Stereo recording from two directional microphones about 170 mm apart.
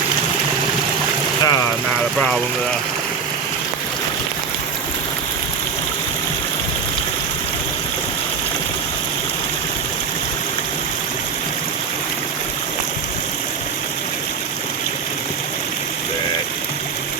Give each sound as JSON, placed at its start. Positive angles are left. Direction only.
{"t": 1.5, "sound": "speech", "side_deg": 20}
{"t": 2.1, "sound": "speech", "side_deg": 10}